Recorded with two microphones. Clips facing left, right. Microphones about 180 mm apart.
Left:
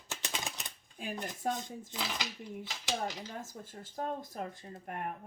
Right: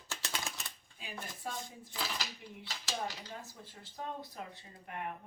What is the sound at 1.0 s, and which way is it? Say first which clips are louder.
Speech: left 7 dB; 50° left (ahead or behind).